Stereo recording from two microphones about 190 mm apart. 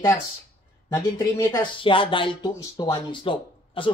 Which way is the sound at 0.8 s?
15° left (ahead or behind).